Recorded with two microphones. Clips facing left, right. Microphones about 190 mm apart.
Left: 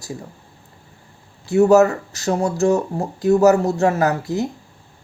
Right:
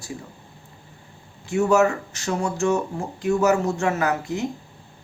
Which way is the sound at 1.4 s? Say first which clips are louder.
Left 6 dB; 35° left (ahead or behind).